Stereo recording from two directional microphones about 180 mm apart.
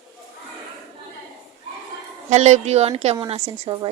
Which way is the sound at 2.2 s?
40° right (ahead or behind).